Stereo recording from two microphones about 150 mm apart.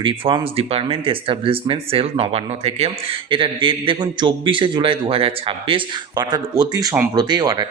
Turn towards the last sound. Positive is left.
turn(degrees=-25)  # may be behind; listen again after turning